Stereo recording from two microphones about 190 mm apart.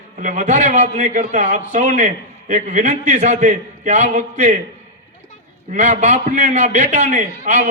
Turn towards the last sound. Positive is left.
turn(degrees=-40)  # may be behind; listen again after turning